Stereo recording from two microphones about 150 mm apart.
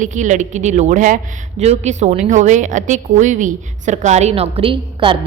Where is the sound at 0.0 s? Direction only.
55° right (ahead or behind).